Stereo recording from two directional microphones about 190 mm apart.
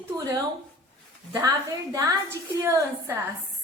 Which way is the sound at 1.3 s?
15° right (ahead or behind).